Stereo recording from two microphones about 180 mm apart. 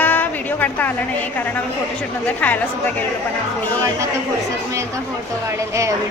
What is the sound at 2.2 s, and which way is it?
Speech, 10° left (ahead or behind).